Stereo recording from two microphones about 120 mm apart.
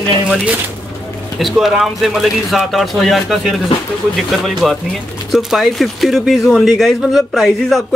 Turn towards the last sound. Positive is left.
turn(degrees=5)  # may be behind; listen again after turning